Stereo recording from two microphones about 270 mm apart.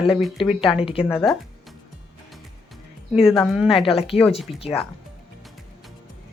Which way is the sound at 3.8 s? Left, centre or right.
Left.